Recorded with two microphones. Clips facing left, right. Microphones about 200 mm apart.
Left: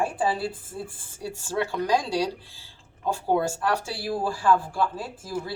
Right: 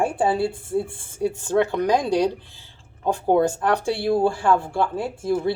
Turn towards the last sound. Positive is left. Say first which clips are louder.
# right 9 dB
turn(degrees=-25)  # may be behind; listen again after turning